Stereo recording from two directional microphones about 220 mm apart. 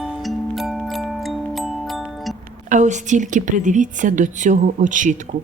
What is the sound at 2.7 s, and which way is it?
Speech, 35° right (ahead or behind).